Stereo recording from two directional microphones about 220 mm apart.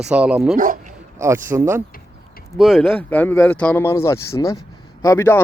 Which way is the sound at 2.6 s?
Centre (ahead or behind).